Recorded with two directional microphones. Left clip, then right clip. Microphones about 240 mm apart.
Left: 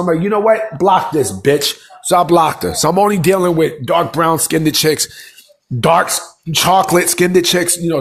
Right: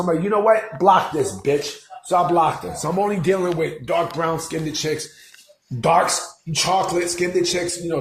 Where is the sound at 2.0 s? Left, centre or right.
Left.